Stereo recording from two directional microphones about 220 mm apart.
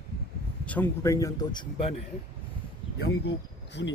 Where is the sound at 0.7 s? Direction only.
10° left (ahead or behind).